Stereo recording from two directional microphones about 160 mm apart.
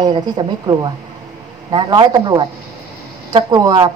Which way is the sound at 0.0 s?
25° right (ahead or behind).